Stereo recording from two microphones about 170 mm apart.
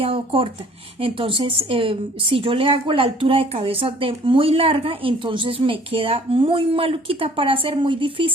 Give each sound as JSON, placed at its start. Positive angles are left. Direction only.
{"t": 0.0, "sound": "a woman's voice", "side_deg": -35}